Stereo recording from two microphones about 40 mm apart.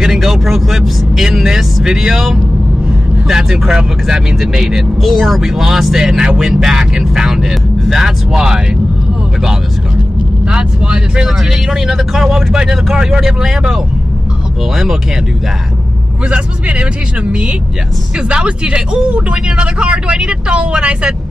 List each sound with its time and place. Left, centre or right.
0.0 s speech: centre
10.4 s speech: right
11.2 s speech: centre
16.3 s speech: right